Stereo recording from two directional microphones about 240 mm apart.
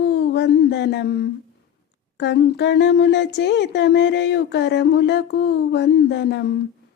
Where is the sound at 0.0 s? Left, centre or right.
Left.